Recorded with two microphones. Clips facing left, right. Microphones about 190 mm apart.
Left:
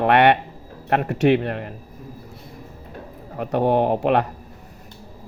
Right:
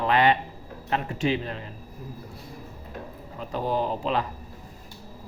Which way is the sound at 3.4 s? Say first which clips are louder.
Left 8 dB; 65° left (ahead or behind).